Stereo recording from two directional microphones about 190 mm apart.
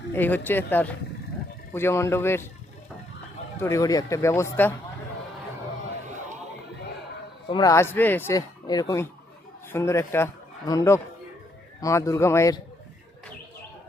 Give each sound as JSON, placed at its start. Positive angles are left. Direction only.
{"t": 0.1, "sound": "speech", "side_deg": 10}
{"t": 3.6, "sound": "speech", "side_deg": 15}
{"t": 7.5, "sound": "speech", "side_deg": 20}